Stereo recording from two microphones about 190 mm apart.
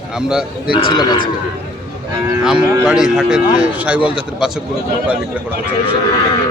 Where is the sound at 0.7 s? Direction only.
25° left (ahead or behind).